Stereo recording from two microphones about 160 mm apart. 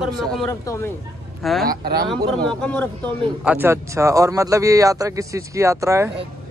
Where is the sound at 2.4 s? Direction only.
10° left (ahead or behind).